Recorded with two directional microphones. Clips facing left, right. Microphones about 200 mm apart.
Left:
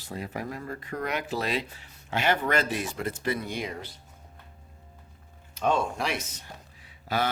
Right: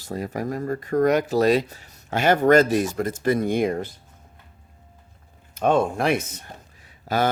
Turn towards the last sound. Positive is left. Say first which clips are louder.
# right 5 dB
turn(degrees=-45)  # may be behind; listen again after turning